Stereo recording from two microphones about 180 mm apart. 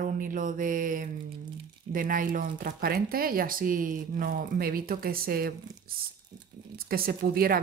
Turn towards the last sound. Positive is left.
turn(degrees=-55)  # may be behind; listen again after turning